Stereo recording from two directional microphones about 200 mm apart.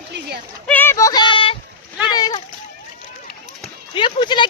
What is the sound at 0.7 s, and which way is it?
Child singing, 10° left (ahead or behind).